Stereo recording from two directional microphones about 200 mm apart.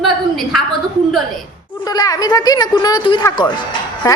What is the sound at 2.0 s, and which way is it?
A woman's voice, 20° left (ahead or behind).